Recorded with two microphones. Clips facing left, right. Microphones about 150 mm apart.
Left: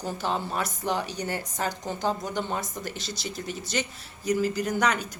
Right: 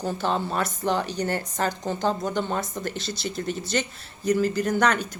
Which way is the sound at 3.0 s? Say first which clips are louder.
Right 4 dB; 55° right (ahead or behind).